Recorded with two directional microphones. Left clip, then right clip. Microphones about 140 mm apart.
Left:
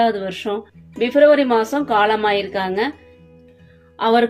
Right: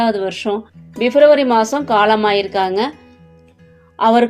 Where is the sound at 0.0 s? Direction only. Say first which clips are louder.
Right 1 dB; 50° right (ahead or behind).